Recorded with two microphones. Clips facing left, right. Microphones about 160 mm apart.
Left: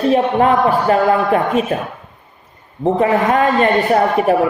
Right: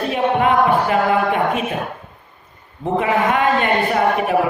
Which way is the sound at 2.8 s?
35° left (ahead or behind).